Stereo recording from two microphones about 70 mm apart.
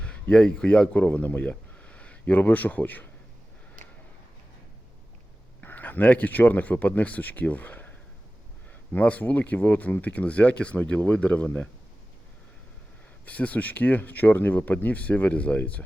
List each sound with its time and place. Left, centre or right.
0.0 s speech: centre
5.5 s speech: left
13.2 s speech: left